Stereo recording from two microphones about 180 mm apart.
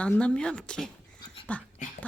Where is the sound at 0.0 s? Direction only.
5° left (ahead or behind).